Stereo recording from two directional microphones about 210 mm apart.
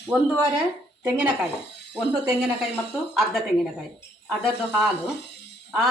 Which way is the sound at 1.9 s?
Centre (ahead or behind).